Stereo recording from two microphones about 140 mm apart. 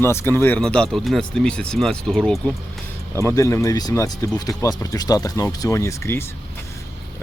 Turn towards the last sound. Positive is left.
turn(degrees=20)  # may be behind; listen again after turning